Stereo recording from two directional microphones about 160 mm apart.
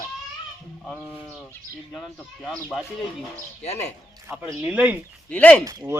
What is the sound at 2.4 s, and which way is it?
Speech, centre (ahead or behind).